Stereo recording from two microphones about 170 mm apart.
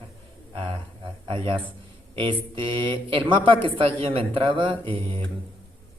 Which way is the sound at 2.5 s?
30° right (ahead or behind).